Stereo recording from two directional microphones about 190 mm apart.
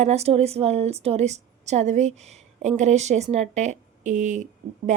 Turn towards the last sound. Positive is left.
turn(degrees=-40)  # may be behind; listen again after turning